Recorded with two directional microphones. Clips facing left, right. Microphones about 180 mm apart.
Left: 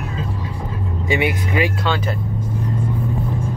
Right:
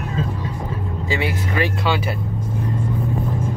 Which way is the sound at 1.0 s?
20° left (ahead or behind).